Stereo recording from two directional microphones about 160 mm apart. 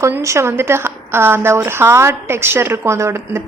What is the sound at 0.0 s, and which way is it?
A woman's voice, 20° right (ahead or behind).